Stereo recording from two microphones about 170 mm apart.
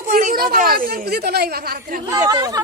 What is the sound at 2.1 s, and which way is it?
Speech, 20° right (ahead or behind).